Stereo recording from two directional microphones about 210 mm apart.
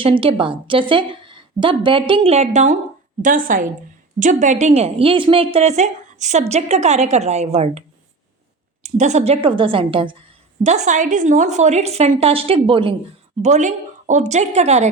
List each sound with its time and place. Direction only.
0.0 s a woman's voice: 25° right (ahead or behind)
10.6 s a woman's voice: 35° right (ahead or behind)
13.4 s a woman's voice: 35° right (ahead or behind)